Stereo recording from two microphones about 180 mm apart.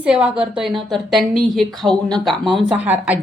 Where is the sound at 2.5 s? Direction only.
25° right (ahead or behind).